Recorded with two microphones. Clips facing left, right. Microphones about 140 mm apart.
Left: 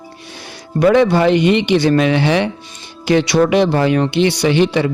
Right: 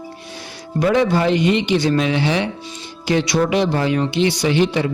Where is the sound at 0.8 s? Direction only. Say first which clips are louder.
Left 5 dB; 65° left (ahead or behind).